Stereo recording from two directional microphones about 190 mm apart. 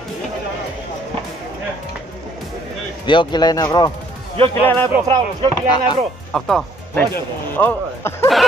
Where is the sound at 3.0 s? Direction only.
25° left (ahead or behind).